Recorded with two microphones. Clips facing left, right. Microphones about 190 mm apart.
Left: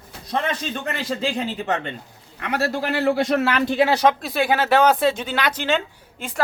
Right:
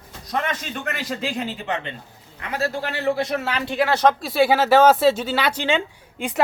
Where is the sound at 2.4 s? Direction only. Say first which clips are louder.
Left 2 dB; 70° left (ahead or behind); by 3.3 s 90° left.